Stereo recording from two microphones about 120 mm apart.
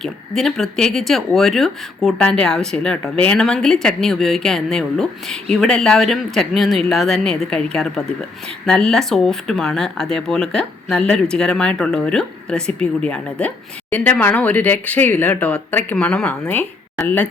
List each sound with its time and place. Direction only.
0.0 s speech: 5° left (ahead or behind)